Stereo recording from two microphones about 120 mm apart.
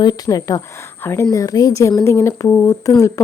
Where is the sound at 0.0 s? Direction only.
35° left (ahead or behind).